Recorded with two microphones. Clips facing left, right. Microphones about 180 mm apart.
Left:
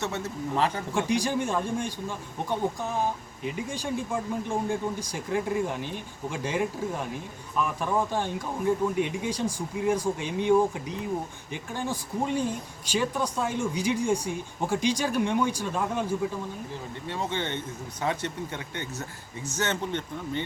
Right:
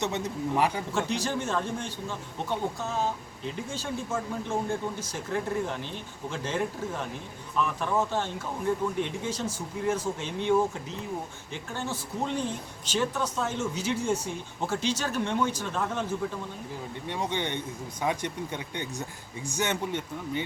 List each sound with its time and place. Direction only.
0.0 s speech: 15° right (ahead or behind)
0.9 s speech: 15° left (ahead or behind)
17.1 s speech: 15° right (ahead or behind)